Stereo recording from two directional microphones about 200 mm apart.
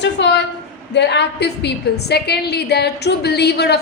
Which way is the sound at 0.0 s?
60° left (ahead or behind).